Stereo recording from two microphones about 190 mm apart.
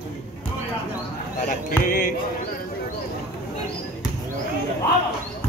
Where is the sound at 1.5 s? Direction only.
45° left (ahead or behind).